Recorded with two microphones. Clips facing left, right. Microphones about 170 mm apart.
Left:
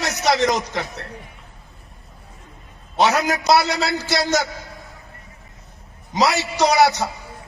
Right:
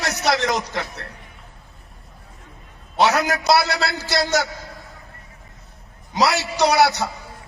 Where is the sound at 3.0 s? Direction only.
20° left (ahead or behind).